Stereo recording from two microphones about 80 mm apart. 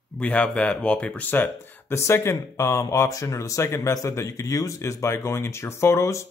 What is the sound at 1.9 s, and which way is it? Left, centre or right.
Speech, left.